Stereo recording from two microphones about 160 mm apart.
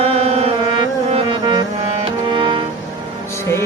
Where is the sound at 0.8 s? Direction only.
30° right (ahead or behind).